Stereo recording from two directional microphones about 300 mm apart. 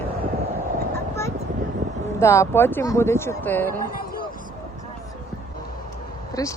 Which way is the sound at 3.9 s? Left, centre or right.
Left.